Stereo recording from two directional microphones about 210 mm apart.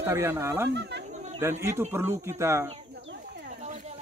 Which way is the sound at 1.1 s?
35° right (ahead or behind).